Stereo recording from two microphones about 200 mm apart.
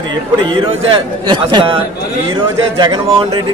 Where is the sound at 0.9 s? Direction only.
20° right (ahead or behind).